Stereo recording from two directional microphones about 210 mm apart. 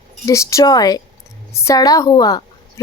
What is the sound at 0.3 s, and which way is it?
A woman's voice, 15° left (ahead or behind).